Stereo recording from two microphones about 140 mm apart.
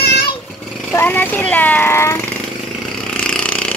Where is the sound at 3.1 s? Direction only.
10° left (ahead or behind).